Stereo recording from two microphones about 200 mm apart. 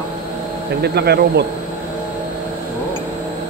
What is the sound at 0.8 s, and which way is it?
Speech, 55° right (ahead or behind).